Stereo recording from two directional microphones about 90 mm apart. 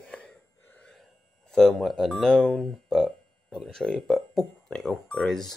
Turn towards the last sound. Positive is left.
turn(degrees=5)  # may be behind; listen again after turning